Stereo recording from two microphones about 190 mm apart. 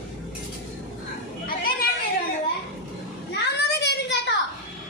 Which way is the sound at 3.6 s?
60° left (ahead or behind).